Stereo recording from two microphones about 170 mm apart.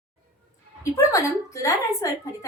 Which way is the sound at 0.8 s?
20° left (ahead or behind).